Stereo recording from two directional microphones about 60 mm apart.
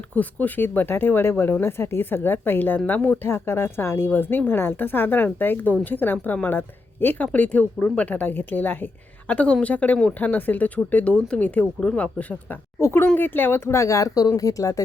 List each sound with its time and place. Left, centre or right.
0.1 s a woman's voice: left
12.8 s a woman's voice: left
13.7 s speech: left